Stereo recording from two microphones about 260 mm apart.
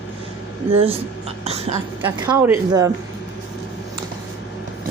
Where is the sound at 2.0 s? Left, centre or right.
Centre.